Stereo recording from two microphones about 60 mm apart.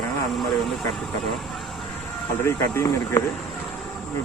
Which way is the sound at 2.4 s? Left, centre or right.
Left.